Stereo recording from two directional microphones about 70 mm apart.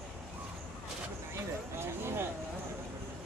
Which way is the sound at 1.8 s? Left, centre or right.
Right.